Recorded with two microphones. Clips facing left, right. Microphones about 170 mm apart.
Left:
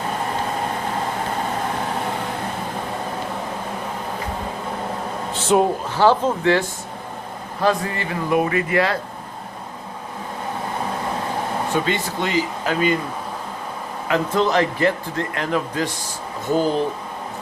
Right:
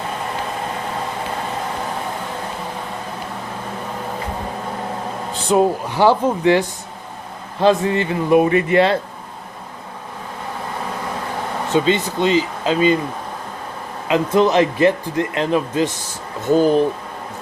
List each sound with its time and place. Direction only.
5.3 s a sound: centre (ahead or behind)
5.9 s speech: 15° right (ahead or behind)
11.7 s speech: 20° right (ahead or behind)
14.1 s speech: 20° right (ahead or behind)